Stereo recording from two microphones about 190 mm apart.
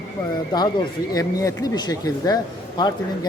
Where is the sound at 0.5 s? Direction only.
25° left (ahead or behind).